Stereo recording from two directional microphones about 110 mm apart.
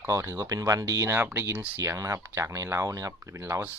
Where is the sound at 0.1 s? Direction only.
30° right (ahead or behind).